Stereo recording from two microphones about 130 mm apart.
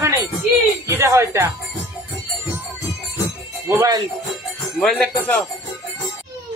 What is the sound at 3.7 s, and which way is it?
Speech, 25° right (ahead or behind).